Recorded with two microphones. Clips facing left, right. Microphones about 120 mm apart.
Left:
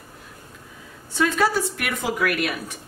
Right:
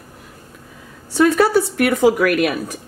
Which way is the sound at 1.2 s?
55° right (ahead or behind).